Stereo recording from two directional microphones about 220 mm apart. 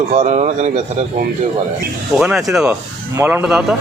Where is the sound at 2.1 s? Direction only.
Centre (ahead or behind).